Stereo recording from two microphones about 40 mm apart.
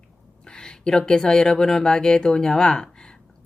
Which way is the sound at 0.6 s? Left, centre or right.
Centre.